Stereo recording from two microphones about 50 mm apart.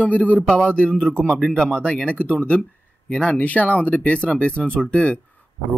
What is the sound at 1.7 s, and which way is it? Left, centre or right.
Speech, centre.